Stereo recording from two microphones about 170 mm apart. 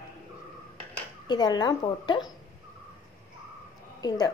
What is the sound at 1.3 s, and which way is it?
A woman's voice, 25° left (ahead or behind).